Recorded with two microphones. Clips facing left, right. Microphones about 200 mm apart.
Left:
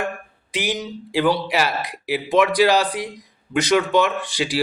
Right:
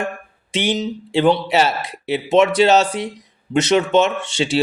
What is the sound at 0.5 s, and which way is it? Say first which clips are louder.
Speech: right 5 dB; 25° right (ahead or behind).